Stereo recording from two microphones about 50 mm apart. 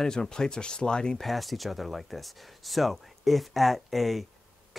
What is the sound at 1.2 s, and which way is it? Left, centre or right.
Speech, centre.